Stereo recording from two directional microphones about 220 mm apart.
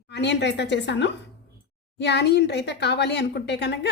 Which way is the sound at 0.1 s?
50° left (ahead or behind).